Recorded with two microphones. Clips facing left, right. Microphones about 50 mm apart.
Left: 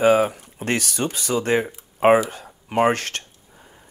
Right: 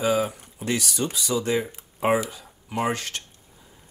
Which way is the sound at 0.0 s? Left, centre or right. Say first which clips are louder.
Left 7 dB; left.